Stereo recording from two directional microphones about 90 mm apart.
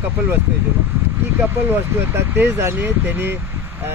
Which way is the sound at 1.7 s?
25° right (ahead or behind).